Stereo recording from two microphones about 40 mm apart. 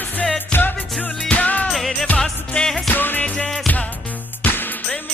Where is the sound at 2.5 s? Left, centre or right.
Centre.